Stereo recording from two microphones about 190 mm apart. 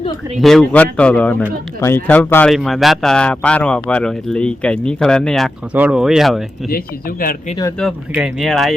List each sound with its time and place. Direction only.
0.3 s a man's voice: centre (ahead or behind)
6.7 s speech: 50° left (ahead or behind)
7.8 s a man's voice: centre (ahead or behind)